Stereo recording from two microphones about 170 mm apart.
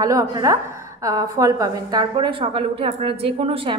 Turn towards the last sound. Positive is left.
turn(degrees=-35)  # may be behind; listen again after turning